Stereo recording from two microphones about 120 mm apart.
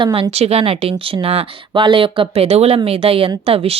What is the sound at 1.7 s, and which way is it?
Speech, 40° right (ahead or behind).